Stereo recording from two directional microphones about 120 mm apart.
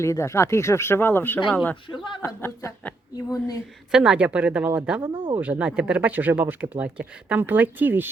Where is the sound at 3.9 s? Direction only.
5° right (ahead or behind).